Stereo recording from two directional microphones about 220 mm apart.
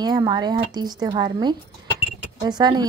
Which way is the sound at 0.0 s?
20° right (ahead or behind).